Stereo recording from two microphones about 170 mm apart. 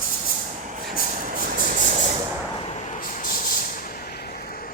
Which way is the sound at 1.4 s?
55° right (ahead or behind).